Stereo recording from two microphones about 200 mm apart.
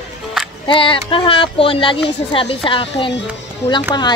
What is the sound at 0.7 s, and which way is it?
Speech, 25° left (ahead or behind).